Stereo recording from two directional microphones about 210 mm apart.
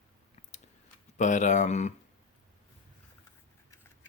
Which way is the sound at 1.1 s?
35° left (ahead or behind).